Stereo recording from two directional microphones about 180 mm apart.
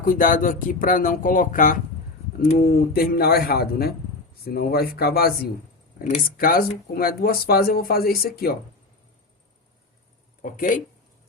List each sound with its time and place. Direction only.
0.0 s speech: 50° left (ahead or behind)
6.0 s speech: 45° left (ahead or behind)
10.4 s speech: 50° left (ahead or behind)